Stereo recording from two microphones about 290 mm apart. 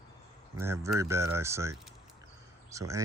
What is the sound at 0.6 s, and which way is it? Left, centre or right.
Speech, centre.